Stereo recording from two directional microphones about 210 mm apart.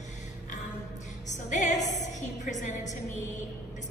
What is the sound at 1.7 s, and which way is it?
Music, 15° left (ahead or behind).